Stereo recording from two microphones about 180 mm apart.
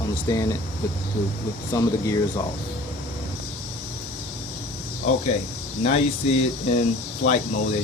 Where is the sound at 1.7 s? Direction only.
20° left (ahead or behind).